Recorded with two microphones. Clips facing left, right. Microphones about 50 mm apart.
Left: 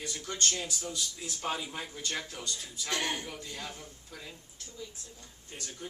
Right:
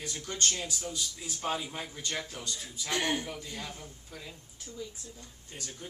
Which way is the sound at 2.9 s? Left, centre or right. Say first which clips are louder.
Right 3 dB; right.